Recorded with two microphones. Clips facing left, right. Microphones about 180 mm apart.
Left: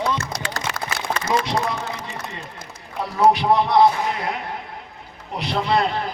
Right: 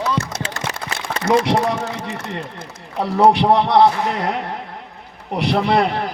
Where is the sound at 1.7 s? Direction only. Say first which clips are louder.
Right 5 dB; 75° right (ahead or behind).